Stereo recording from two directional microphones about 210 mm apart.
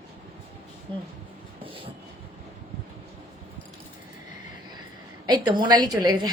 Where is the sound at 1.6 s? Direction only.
25° right (ahead or behind).